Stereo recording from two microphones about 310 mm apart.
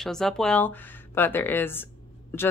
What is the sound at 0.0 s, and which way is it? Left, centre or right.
A woman's voice, centre.